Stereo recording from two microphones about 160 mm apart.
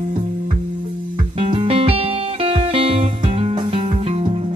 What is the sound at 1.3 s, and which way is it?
Music, 35° right (ahead or behind).